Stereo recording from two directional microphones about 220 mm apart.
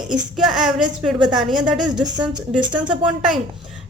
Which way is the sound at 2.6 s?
20° right (ahead or behind).